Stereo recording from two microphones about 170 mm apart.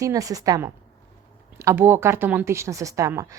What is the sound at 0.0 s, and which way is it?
A woman's voice, 20° right (ahead or behind).